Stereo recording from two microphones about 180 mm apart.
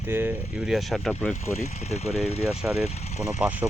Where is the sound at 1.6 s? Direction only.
35° left (ahead or behind).